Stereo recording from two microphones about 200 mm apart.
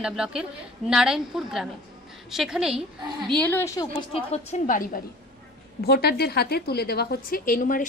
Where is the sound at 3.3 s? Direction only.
10° left (ahead or behind).